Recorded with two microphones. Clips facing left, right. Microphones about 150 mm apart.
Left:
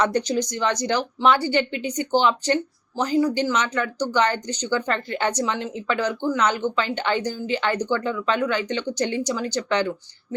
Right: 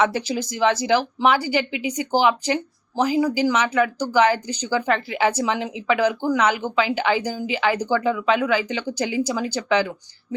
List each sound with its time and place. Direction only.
0.0 s speech: 5° right (ahead or behind)